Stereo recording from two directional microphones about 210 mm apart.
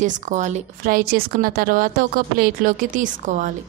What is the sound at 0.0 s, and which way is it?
A woman's voice, 35° right (ahead or behind).